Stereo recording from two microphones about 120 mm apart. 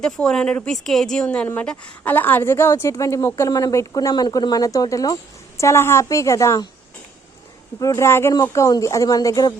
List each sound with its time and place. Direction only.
0.0 s speech: 5° left (ahead or behind); by 6.7 s 25° left (ahead or behind)
7.8 s speech: 25° left (ahead or behind)